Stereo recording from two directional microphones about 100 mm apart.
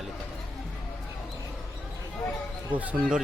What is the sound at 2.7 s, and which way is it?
Speech, 15° right (ahead or behind).